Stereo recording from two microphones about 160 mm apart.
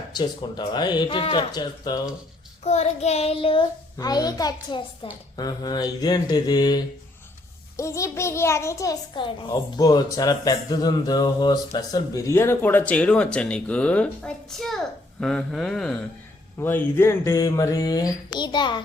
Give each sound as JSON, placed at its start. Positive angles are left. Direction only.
{"t": 0.1, "sound": "speech", "side_deg": 25}
{"t": 2.6, "sound": "child singing", "side_deg": 45}
{"t": 3.9, "sound": "speech", "side_deg": 25}
{"t": 5.0, "sound": "child singing", "side_deg": 35}
{"t": 5.4, "sound": "a child's voice", "side_deg": 25}